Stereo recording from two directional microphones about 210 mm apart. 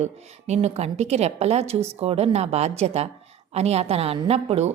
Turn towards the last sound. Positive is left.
turn(degrees=-30)  # may be behind; listen again after turning